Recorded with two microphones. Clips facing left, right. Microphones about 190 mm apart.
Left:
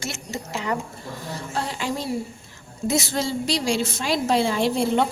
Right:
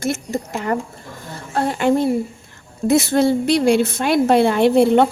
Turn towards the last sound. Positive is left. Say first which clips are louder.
# right 8 dB
turn(degrees=-60)  # may be behind; listen again after turning